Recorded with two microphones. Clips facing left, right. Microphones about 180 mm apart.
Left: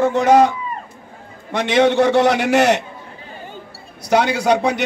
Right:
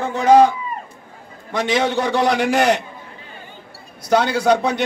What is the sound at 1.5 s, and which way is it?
A man's voice, 70° left (ahead or behind).